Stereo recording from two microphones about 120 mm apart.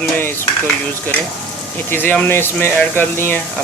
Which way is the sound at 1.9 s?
15° left (ahead or behind).